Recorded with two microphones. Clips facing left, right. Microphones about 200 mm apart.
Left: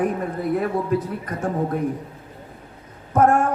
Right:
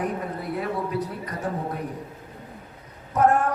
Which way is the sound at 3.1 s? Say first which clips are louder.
Left 3 dB; 50° left (ahead or behind).